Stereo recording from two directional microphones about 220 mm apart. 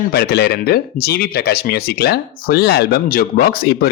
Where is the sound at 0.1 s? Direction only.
45° left (ahead or behind).